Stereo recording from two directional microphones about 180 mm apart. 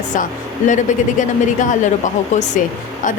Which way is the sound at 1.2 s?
45° left (ahead or behind).